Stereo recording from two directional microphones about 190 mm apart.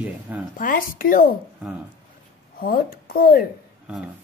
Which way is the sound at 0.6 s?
45° left (ahead or behind).